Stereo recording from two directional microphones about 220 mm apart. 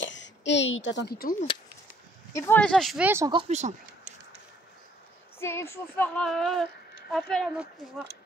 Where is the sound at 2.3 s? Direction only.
10° left (ahead or behind); by 3.3 s 10° right (ahead or behind).